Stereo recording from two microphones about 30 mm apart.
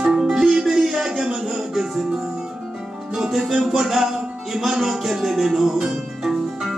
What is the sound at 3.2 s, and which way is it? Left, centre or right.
Music, centre.